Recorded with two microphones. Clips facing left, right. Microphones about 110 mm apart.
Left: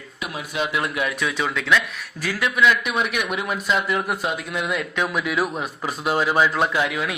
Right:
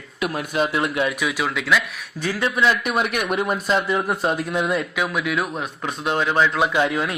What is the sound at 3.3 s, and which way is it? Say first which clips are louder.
Speech: right 4 dB; 45° right (ahead or behind).